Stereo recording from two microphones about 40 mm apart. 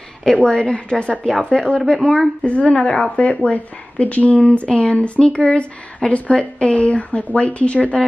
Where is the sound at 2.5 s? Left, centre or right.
Left.